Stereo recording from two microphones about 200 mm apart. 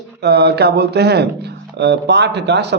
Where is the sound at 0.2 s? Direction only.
55° right (ahead or behind).